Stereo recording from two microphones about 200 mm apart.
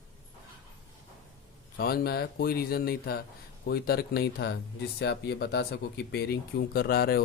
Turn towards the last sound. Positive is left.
turn(degrees=50)  # may be behind; listen again after turning